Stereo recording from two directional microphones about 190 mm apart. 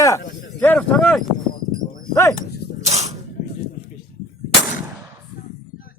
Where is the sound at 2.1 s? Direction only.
15° left (ahead or behind).